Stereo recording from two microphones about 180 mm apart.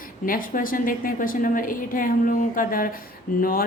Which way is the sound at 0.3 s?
50° left (ahead or behind).